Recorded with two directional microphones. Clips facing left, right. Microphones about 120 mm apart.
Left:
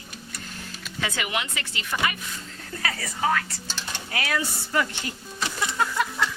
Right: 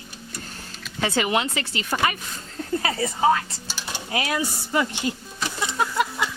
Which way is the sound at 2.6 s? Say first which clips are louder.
Right 8 dB; 25° right (ahead or behind).